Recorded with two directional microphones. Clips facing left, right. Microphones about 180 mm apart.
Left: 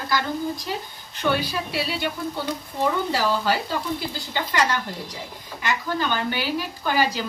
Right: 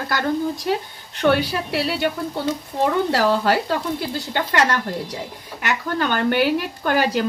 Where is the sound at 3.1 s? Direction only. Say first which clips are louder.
Right 5 dB; 65° right (ahead or behind).